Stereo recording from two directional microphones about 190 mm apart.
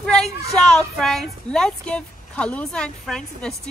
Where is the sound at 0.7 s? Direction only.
Centre (ahead or behind).